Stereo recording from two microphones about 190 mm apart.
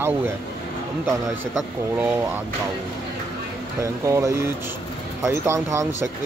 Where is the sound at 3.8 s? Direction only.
15° right (ahead or behind).